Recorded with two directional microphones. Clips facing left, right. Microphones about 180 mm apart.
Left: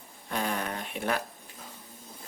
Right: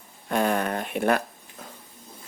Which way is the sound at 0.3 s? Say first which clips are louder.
Right 8 dB; 60° right (ahead or behind).